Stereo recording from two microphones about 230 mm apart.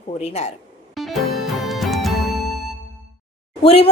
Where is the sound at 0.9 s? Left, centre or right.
Centre.